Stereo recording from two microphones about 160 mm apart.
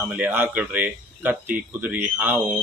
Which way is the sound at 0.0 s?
10° right (ahead or behind).